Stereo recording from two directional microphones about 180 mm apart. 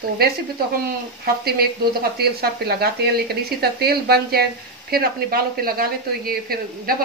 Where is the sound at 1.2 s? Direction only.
60° right (ahead or behind).